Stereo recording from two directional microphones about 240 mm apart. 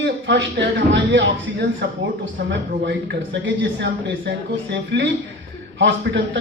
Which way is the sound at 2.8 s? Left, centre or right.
Right.